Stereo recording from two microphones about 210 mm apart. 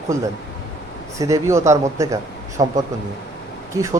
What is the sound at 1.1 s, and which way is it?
Speech, 15° right (ahead or behind).